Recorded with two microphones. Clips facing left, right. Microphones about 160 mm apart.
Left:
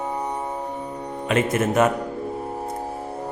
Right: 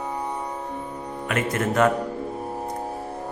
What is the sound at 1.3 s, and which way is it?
Speech, 25° left (ahead or behind).